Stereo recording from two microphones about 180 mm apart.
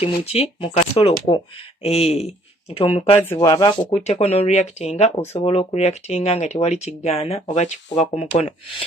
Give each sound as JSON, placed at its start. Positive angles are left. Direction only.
{"t": 0.0, "sound": "speech", "side_deg": 35}
{"t": 3.2, "sound": "speech", "side_deg": 20}